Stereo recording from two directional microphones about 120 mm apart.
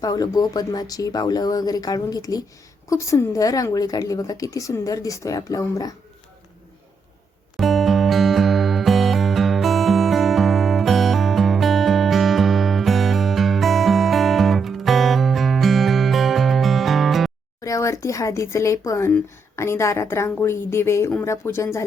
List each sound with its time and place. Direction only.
0.0 s a woman's voice: 30° left (ahead or behind)
7.5 s music: centre (ahead or behind)
17.6 s a woman's voice: 25° left (ahead or behind)